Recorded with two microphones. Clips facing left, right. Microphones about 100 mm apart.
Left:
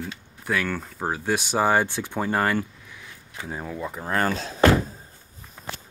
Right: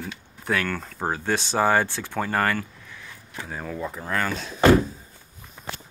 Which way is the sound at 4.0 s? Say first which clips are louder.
Left 4 dB; 35° left (ahead or behind).